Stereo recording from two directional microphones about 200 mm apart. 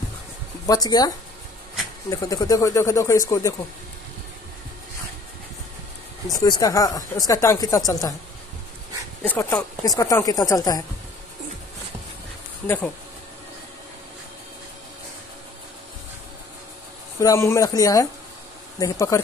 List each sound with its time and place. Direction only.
0.7 s speech: 20° left (ahead or behind)
6.3 s speech: 20° left (ahead or behind)
9.2 s speech: 10° left (ahead or behind)
12.6 s speech: 10° left (ahead or behind)
17.2 s speech: 15° left (ahead or behind)